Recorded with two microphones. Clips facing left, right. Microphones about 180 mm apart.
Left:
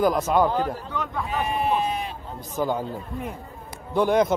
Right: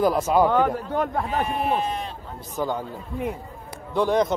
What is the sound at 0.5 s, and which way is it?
Speech, 65° right (ahead or behind).